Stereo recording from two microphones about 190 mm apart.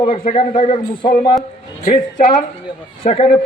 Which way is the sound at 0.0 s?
30° left (ahead or behind).